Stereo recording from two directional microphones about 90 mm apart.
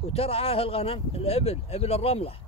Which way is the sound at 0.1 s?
90° left.